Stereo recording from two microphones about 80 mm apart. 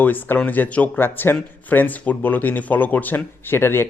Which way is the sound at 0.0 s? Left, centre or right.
Left.